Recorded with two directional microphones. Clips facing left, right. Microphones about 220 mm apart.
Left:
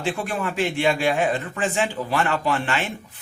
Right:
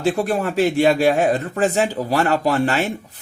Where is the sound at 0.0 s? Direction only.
40° right (ahead or behind).